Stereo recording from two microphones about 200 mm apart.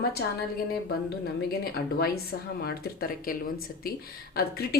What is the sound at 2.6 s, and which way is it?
Speech, 50° left (ahead or behind).